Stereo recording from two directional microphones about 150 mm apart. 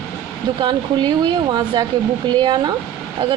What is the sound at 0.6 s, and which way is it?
A woman's voice, 30° right (ahead or behind).